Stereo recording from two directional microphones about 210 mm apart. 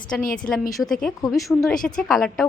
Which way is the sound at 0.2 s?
40° left (ahead or behind).